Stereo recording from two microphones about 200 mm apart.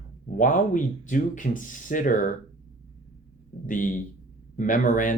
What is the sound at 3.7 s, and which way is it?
Speech, 40° left (ahead or behind).